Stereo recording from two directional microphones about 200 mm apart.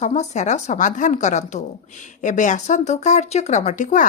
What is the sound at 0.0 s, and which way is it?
A woman's voice, 35° left (ahead or behind).